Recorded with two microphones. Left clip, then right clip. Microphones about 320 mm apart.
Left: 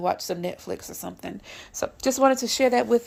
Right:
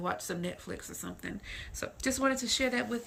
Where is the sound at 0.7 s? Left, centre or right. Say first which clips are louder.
Left 9 dB; centre.